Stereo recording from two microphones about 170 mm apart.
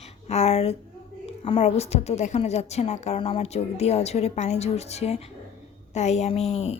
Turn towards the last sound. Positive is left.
turn(degrees=35)  # may be behind; listen again after turning